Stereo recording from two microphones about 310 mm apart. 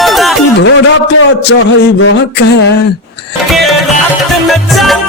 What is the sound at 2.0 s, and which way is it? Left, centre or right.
Speech, left.